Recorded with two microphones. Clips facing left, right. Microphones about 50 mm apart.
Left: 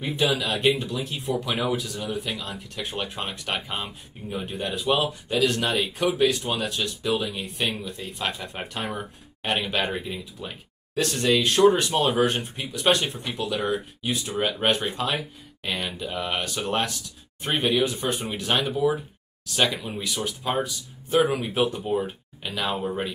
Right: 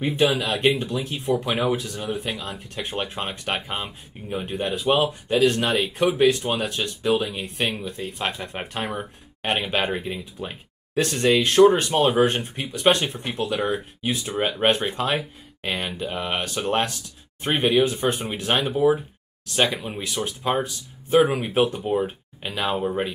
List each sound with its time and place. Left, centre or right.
0.0 s speech: right
11.0 s speech: right
21.8 s speech: centre
22.4 s speech: right
22.7 s speech: centre